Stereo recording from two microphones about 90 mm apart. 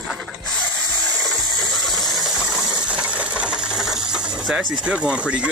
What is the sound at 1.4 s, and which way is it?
Engine, 50° left (ahead or behind).